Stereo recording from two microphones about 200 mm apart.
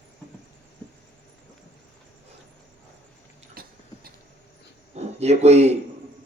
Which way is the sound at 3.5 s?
50° right (ahead or behind).